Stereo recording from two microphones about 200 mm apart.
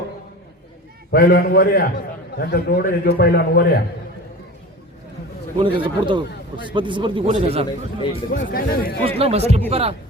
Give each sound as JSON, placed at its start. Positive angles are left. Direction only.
{"t": 1.1, "sound": "a man's voice", "side_deg": 45}
{"t": 5.6, "sound": "a man's voice", "side_deg": -25}
{"t": 8.3, "sound": "a man's voice", "side_deg": 45}
{"t": 9.0, "sound": "a man's voice", "side_deg": -30}